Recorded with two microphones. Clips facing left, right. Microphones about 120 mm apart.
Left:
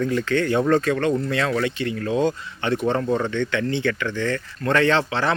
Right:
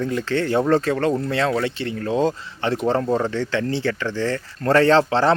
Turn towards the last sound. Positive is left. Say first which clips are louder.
# right 5 dB
turn(degrees=-35)  # may be behind; listen again after turning